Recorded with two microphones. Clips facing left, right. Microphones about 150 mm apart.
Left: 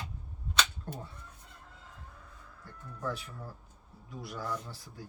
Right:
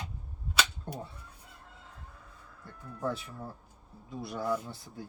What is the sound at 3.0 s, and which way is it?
Speech, 25° right (ahead or behind).